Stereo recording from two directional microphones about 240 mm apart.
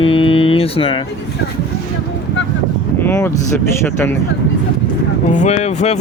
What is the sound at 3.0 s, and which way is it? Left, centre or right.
Speech, centre.